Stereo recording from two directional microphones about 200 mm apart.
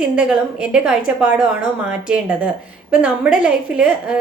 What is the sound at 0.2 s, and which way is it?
A woman's voice, 5° right (ahead or behind).